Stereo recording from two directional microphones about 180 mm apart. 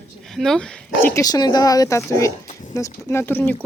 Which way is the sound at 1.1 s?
20° left (ahead or behind).